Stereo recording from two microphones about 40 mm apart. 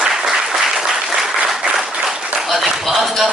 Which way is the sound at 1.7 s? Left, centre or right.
Centre.